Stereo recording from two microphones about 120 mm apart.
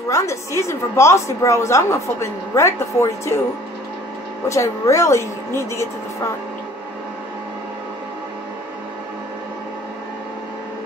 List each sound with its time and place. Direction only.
0.1 s a woman's voice: 25° left (ahead or behind)
4.5 s a woman's voice: 25° left (ahead or behind)